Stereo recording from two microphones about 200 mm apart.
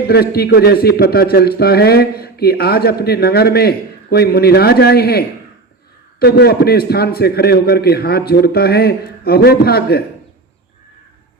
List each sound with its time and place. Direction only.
0.1 s a man's voice: 50° left (ahead or behind)